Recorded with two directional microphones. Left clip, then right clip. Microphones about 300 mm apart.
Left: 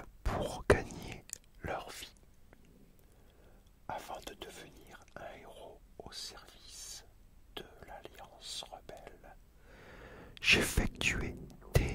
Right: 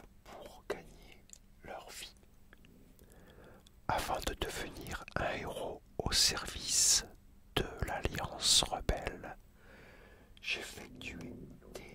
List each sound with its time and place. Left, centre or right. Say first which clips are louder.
0.2 s whispering: left 14 dB; left
1.6 s whispering: left 7 dB; left
3.8 s whispering: right 8 dB; right
10.3 s whispering: left 11 dB; left